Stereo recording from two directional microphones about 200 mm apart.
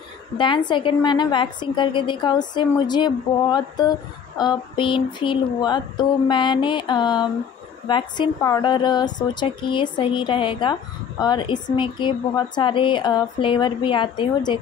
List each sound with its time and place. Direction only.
0.4 s a woman's voice: 25° left (ahead or behind)